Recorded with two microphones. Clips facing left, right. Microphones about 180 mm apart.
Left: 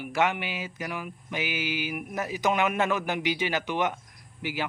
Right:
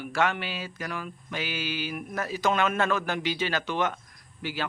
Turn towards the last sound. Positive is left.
turn(degrees=15)  # may be behind; listen again after turning